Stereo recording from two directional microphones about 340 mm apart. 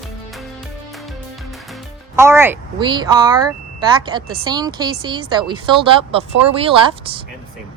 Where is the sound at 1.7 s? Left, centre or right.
Centre.